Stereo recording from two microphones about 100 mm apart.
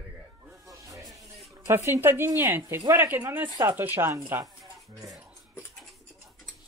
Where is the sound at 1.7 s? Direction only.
25° right (ahead or behind).